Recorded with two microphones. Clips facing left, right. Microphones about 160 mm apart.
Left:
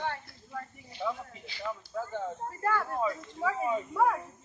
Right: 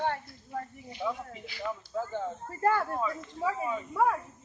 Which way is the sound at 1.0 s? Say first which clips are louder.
Even; 10° right (ahead or behind).